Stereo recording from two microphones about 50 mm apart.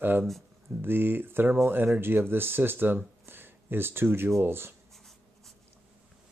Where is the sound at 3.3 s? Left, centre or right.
Right.